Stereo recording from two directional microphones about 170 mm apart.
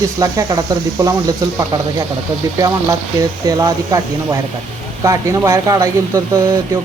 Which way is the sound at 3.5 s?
20° right (ahead or behind).